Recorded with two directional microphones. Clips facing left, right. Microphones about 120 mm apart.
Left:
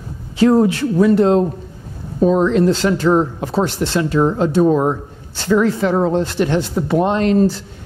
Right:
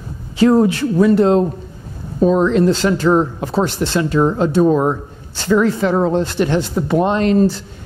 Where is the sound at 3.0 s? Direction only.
15° right (ahead or behind).